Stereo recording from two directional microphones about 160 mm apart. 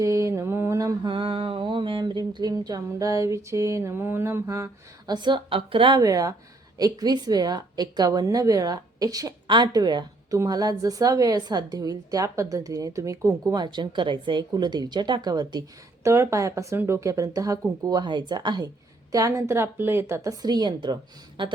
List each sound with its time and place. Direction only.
0.0 s mantra: 20° right (ahead or behind)
6.7 s a woman's voice: 25° right (ahead or behind)